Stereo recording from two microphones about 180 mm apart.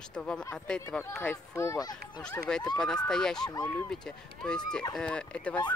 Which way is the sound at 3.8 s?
5° left (ahead or behind).